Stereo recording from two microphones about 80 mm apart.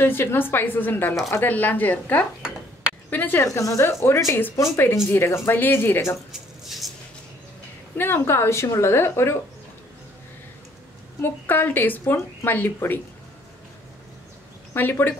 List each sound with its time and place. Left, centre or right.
0.0 s speech: left
3.5 s a woman's voice: left
8.0 s a woman's voice: left
11.1 s speech: left
14.7 s speech: left